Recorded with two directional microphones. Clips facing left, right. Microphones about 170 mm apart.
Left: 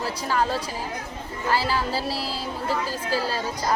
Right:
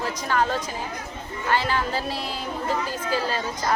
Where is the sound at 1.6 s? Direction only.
35° left (ahead or behind).